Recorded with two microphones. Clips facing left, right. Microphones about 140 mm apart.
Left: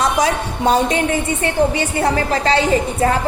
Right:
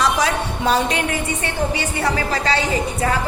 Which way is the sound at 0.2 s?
45° left (ahead or behind).